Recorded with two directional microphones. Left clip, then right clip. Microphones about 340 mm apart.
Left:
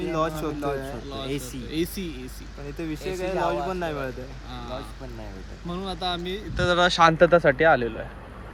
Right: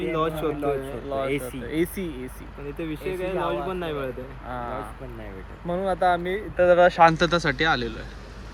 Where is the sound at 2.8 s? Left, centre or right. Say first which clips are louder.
Even; centre.